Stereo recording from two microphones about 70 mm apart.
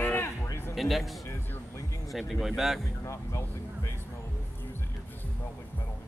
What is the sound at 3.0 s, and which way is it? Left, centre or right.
Music, left.